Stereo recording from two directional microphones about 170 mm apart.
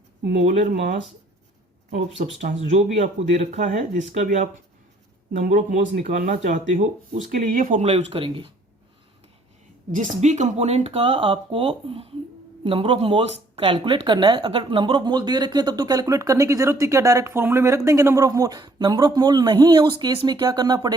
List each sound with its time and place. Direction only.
0.4 s speech: 45° right (ahead or behind)
1.9 s speech: 45° right (ahead or behind)
5.8 s speech: 90° right
6.1 s speech: 55° right (ahead or behind)
7.9 s speech: 35° right (ahead or behind)
10.2 s a woman's voice: 45° right (ahead or behind); by 20.9 s 25° right (ahead or behind)